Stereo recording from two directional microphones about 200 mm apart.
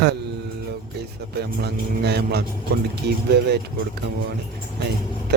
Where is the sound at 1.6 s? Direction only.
55° right (ahead or behind).